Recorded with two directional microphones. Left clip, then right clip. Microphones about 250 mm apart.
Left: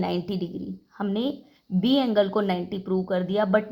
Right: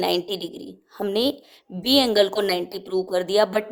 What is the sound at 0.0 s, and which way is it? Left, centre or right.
A woman's voice, right.